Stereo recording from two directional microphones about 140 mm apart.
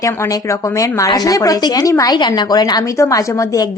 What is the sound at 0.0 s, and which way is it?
Speech, 20° left (ahead or behind).